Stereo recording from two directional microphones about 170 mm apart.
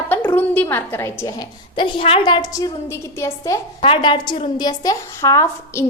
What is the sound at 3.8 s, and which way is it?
A woman's voice, 30° left (ahead or behind).